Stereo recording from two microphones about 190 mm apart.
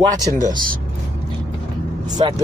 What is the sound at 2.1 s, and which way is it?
Speech, 20° right (ahead or behind).